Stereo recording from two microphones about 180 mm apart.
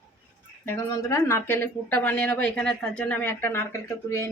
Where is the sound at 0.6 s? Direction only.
15° left (ahead or behind).